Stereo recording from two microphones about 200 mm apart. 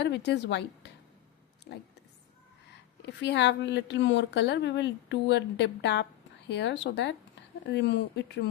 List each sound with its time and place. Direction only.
0.0 s speech: 60° left (ahead or behind)
3.2 s speech: 60° left (ahead or behind)